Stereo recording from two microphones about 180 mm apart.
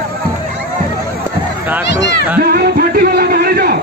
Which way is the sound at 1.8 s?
75° left (ahead or behind).